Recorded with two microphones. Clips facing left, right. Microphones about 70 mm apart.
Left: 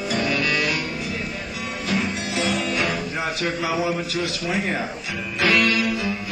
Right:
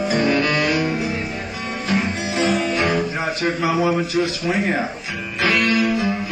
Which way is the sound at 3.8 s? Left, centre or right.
Right.